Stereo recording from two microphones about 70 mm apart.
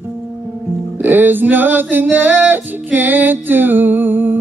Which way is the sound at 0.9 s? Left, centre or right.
Right.